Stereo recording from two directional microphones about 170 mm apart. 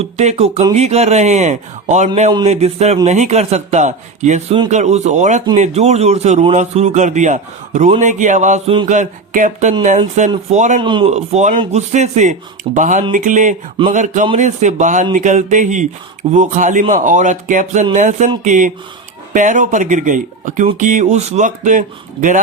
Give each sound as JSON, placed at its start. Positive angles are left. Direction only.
{"t": 0.0, "sound": "speech", "side_deg": -40}
{"t": 10.8, "sound": "speech", "side_deg": -30}
{"t": 11.1, "sound": "speech", "side_deg": -45}